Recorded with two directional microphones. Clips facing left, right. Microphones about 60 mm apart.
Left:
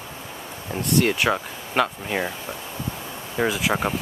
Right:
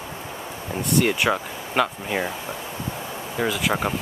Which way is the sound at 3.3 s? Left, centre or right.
Centre.